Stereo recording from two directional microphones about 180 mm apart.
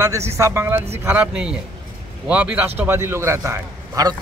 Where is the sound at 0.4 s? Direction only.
15° right (ahead or behind).